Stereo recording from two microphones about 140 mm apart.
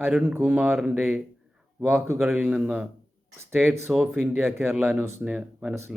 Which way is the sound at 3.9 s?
10° right (ahead or behind).